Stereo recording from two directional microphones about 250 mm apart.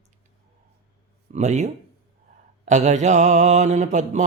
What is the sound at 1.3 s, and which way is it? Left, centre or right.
Mantra, right.